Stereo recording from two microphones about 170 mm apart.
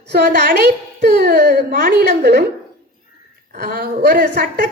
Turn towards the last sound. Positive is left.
turn(degrees=-80)